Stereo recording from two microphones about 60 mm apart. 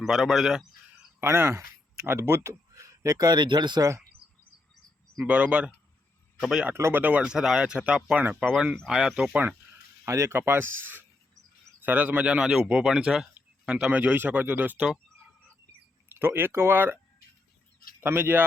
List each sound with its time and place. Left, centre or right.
0.0 s speech: centre
1.2 s speech: right
3.8 s speech: right
5.1 s speech: right
6.4 s speech: centre
6.9 s speech: right
7.2 s speech: centre
9.3 s speech: right
10.1 s speech: right
10.3 s speech: right
16.1 s speech: right
18.0 s speech: right